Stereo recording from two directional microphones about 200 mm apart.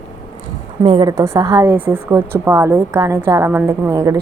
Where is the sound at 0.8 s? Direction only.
25° right (ahead or behind).